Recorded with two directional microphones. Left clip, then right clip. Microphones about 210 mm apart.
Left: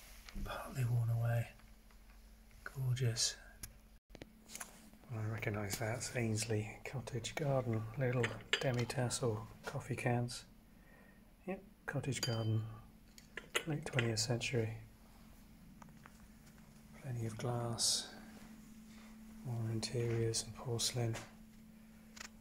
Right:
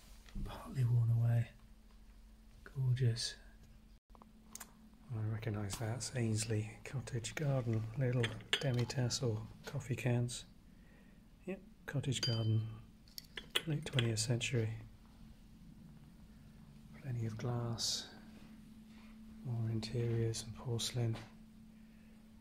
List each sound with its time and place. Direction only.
0.5 s a sound: 10° right (ahead or behind)
2.6 s speech: 10° right (ahead or behind)
5.1 s speech: 5° right (ahead or behind)
11.4 s speech: 5° right (ahead or behind)
16.9 s speech: centre (ahead or behind)
19.4 s speech: centre (ahead or behind)